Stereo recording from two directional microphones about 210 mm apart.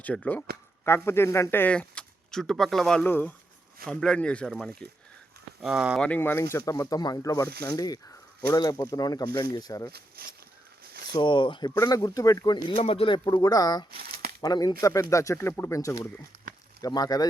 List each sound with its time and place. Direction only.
0.0 s speech: 5° left (ahead or behind)
6.1 s speech: 10° left (ahead or behind)
9.9 s speech: 45° right (ahead or behind)
11.1 s speech: 25° left (ahead or behind)